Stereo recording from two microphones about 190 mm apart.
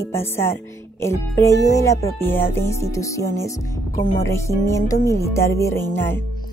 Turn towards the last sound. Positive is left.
turn(degrees=15)  # may be behind; listen again after turning